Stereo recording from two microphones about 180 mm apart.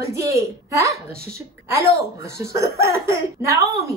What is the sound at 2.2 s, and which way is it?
Speech, 15° right (ahead or behind).